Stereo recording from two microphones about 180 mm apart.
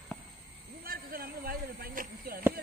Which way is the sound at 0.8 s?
55° right (ahead or behind).